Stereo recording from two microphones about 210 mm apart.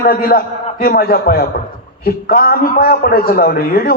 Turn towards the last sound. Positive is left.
turn(degrees=45)  # may be behind; listen again after turning